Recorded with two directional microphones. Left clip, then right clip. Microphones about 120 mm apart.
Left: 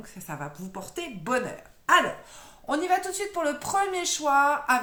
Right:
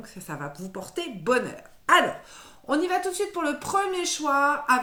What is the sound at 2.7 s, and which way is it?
A woman's voice, 30° left (ahead or behind).